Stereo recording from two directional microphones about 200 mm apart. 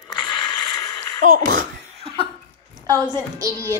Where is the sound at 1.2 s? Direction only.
45° right (ahead or behind).